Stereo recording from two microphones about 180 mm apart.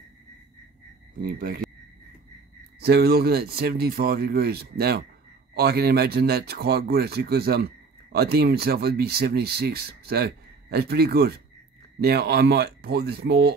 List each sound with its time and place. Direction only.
1.2 s speech: 50° right (ahead or behind)
2.8 s speech: 60° right (ahead or behind)